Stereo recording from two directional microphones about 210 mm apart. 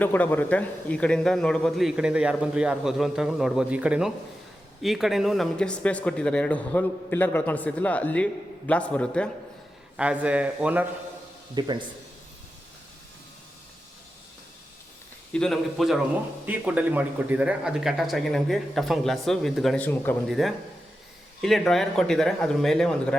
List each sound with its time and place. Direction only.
0.0 s speech: 10° left (ahead or behind)
10.0 s speech: 5° right (ahead or behind)
11.6 s a man's voice: 20° right (ahead or behind)
15.3 s speech: centre (ahead or behind)